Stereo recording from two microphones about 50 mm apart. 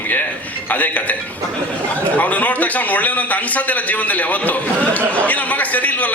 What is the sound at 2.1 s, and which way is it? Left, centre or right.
A man's voice, left.